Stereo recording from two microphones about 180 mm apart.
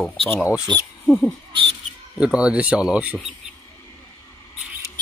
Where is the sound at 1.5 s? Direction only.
30° right (ahead or behind).